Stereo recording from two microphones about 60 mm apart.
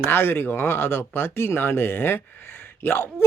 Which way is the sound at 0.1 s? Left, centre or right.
Left.